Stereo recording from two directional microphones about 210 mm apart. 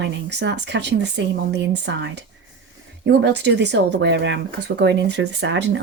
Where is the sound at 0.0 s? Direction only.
55° right (ahead or behind).